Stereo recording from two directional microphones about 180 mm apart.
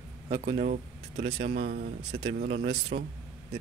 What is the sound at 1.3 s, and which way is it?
Speech, 65° right (ahead or behind).